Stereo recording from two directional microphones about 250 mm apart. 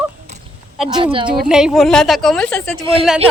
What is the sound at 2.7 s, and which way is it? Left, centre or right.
Speech, right.